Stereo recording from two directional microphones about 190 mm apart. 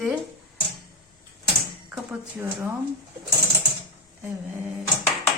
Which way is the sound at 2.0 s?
10° right (ahead or behind).